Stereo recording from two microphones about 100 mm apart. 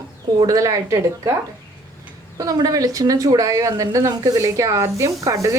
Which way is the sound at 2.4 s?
35° right (ahead or behind).